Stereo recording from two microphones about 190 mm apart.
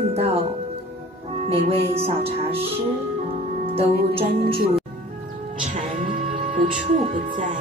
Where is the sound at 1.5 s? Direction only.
30° right (ahead or behind).